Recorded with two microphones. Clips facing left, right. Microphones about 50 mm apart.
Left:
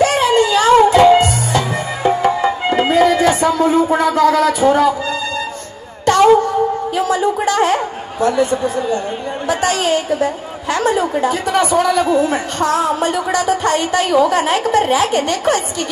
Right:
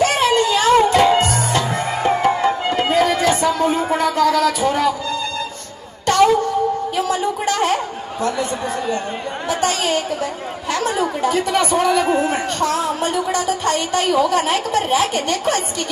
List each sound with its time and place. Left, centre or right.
0.3 s music: left
2.4 s music: left
3.6 s a sound: right
3.9 s a woman's voice: left
6.0 s a sound: left
8.6 s a man's voice: right
9.5 s a woman's voice: left
11.7 s a man's voice: right
12.5 s a woman's voice: left